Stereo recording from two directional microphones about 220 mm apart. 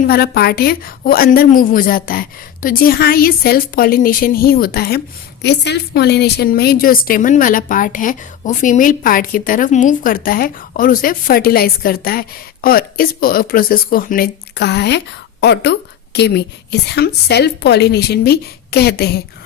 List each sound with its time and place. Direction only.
0.1 s a woman's voice: 45° left (ahead or behind)